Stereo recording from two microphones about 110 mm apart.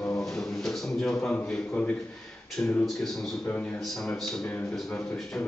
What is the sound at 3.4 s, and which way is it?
Speech, 15° left (ahead or behind).